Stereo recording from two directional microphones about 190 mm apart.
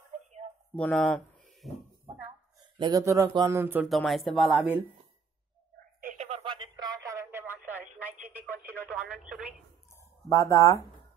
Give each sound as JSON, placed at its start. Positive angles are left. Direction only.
{"t": 0.7, "sound": "speech", "side_deg": 5}
{"t": 2.0, "sound": "a sound", "side_deg": -30}
{"t": 2.8, "sound": "speech", "side_deg": -15}
{"t": 3.9, "sound": "speech", "side_deg": 0}
{"t": 5.9, "sound": "telephone", "side_deg": -45}
{"t": 6.4, "sound": "radio", "side_deg": -25}
{"t": 9.2, "sound": "telephone", "side_deg": -5}
{"t": 10.3, "sound": "speech", "side_deg": 15}